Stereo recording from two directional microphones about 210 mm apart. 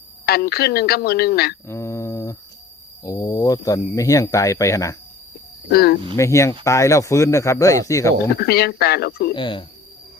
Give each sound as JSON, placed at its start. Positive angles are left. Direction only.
{"t": 0.3, "sound": "speech", "side_deg": 50}
{"t": 1.6, "sound": "guitar", "side_deg": 10}
{"t": 3.0, "sound": "speech", "side_deg": 15}
{"t": 5.7, "sound": "speech", "side_deg": 50}
{"t": 6.1, "sound": "speech", "side_deg": 15}
{"t": 8.4, "sound": "speech", "side_deg": 50}
{"t": 9.3, "sound": "speech", "side_deg": 25}